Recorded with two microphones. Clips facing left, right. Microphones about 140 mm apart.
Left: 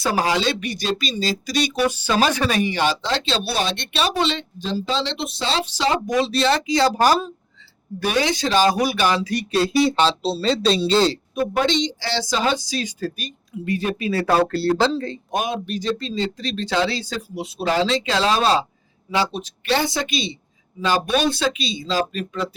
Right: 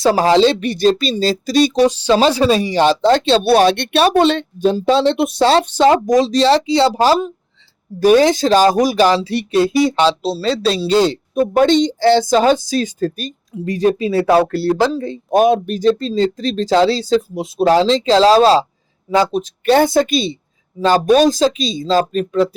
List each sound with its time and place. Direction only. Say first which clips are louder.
0.0 s speech: right 9 dB; 40° right (ahead or behind)
1.8 s speech: right 4 dB; 25° right (ahead or behind)
3.2 s speech: right 12 dB; 55° right (ahead or behind); by 7.3 s 20° right (ahead or behind)
7.9 s speech: right 11 dB; 40° right (ahead or behind)
9.5 s speech: right 5 dB; 15° right (ahead or behind)
11.3 s speech: right 9 dB; 45° right (ahead or behind)
13.7 s speech: right 8 dB; 35° right (ahead or behind)
14.1 s speech: right 6 dB; 20° right (ahead or behind)
14.4 s speech: right 3 dB; 10° right (ahead or behind)
15.4 s speech: right 12 dB; 45° right (ahead or behind)
19.1 s speech: right 8 dB; 45° right (ahead or behind)